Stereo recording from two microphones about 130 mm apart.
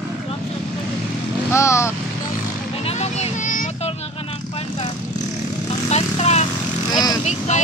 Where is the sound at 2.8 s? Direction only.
55° left (ahead or behind); by 3.6 s 80° left.